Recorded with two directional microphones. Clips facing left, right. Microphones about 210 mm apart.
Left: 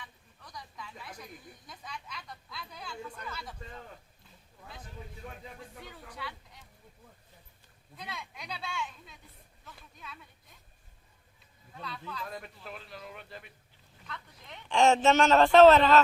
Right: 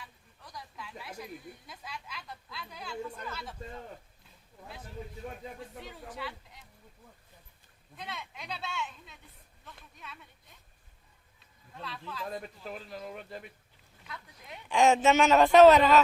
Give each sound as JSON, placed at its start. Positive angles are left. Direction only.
{"t": 0.0, "sound": "a sound", "side_deg": -5}
{"t": 5.5, "sound": "speech", "side_deg": 0}
{"t": 7.9, "sound": "speech", "side_deg": 0}
{"t": 9.6, "sound": "a sound", "side_deg": 0}
{"t": 11.7, "sound": "speech", "side_deg": 0}
{"t": 12.2, "sound": "speech", "side_deg": -35}
{"t": 14.1, "sound": "a man's voice", "side_deg": -10}